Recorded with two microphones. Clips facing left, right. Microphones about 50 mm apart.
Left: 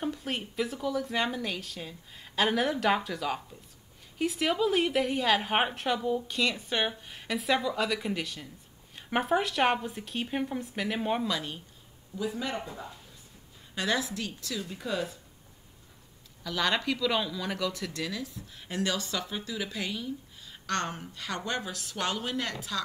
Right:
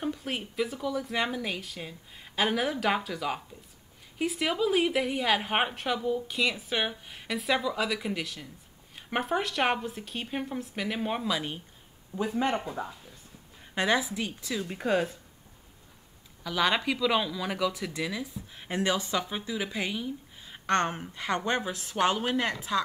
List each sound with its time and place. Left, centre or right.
0.0 s speech: centre
11.3 s speech: centre
12.2 s speech: right
13.7 s speech: centre
14.6 s speech: right
16.4 s speech: centre